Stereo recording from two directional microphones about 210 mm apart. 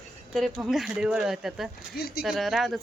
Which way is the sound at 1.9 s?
50° left (ahead or behind).